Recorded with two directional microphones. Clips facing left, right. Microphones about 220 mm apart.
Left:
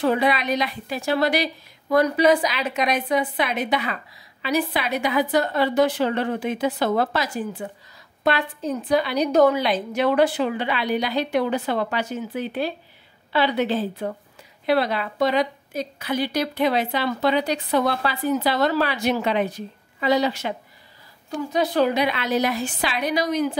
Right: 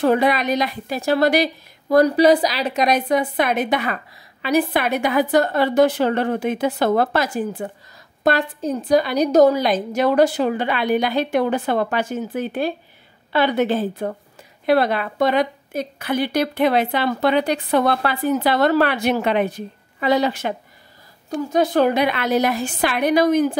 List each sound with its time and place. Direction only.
0.0 s a woman's voice: 45° right (ahead or behind)